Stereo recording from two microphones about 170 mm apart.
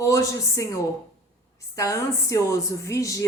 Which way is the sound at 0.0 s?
20° left (ahead or behind).